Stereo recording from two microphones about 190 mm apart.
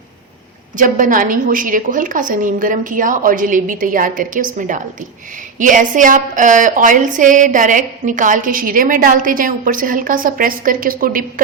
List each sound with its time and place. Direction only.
0.8 s a woman's voice: 45° right (ahead or behind)